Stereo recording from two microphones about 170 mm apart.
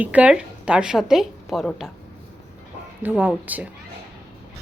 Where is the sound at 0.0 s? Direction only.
10° right (ahead or behind).